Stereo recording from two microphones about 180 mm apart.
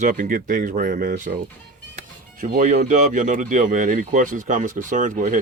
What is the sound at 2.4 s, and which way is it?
Speech, 50° right (ahead or behind).